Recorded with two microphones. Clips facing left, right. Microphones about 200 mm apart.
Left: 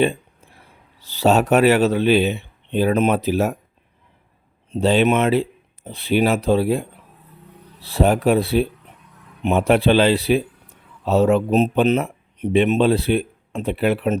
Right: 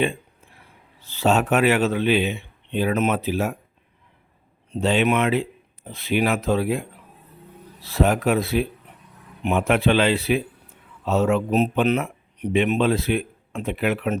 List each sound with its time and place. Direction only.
1.1 s speech: 35° left (ahead or behind)
4.7 s speech: 35° left (ahead or behind)